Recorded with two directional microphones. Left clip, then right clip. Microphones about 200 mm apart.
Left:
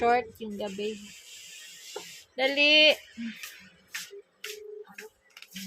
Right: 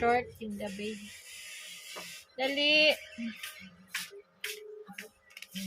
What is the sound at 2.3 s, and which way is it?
Speech, 35° left (ahead or behind).